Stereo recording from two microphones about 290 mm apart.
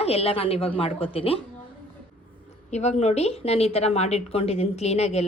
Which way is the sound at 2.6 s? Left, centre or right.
Left.